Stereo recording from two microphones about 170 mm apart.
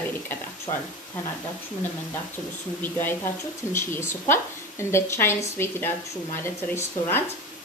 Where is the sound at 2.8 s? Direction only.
10° left (ahead or behind).